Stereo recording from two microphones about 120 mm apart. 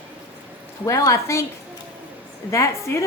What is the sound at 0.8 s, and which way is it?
Speech, 25° left (ahead or behind).